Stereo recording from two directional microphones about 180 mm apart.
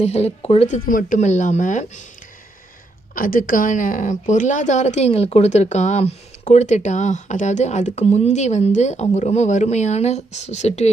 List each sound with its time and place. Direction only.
0.0 s a woman's voice: 35° left (ahead or behind)
0.9 s speech: 45° left (ahead or behind)
3.2 s a woman's voice: 50° left (ahead or behind)